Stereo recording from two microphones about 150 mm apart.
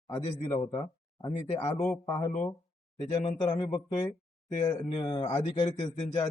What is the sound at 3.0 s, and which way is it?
A man's voice, 35° left (ahead or behind).